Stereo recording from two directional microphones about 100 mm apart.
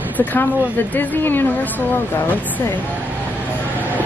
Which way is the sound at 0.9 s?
20° left (ahead or behind).